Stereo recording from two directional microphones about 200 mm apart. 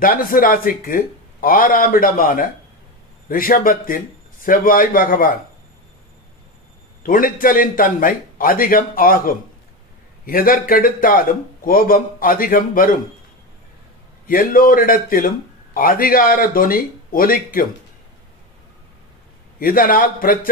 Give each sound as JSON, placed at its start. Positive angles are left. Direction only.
{"t": 0.0, "sound": "a man's voice", "side_deg": 45}
{"t": 7.0, "sound": "a man's voice", "side_deg": 45}
{"t": 14.2, "sound": "a man's voice", "side_deg": 45}
{"t": 19.6, "sound": "a man's voice", "side_deg": 45}